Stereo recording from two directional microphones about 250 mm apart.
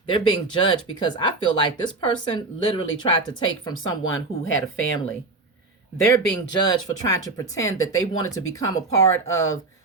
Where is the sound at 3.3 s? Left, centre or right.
Centre.